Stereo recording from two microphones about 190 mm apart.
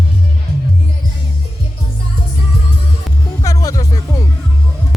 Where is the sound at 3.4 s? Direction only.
20° left (ahead or behind).